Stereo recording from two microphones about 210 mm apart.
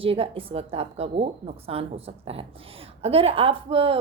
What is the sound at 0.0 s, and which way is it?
Speech, 25° right (ahead or behind).